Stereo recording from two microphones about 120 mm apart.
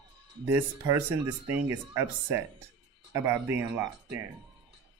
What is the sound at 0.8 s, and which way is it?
Speech, 30° right (ahead or behind).